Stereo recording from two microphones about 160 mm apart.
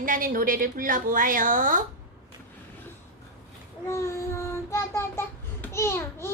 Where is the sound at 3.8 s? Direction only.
15° left (ahead or behind).